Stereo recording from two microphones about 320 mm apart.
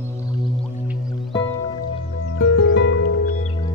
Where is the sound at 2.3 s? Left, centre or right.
Left.